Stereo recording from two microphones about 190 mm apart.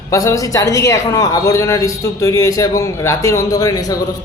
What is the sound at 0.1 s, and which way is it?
A man's voice, 15° left (ahead or behind).